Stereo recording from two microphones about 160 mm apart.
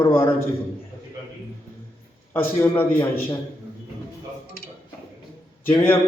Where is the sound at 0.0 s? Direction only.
35° left (ahead or behind).